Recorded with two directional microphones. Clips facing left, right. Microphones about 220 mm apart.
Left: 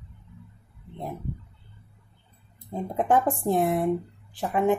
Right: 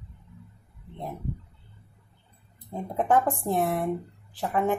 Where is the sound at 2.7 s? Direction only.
15° left (ahead or behind).